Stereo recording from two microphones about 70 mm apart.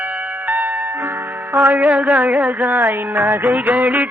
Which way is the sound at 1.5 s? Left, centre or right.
Right.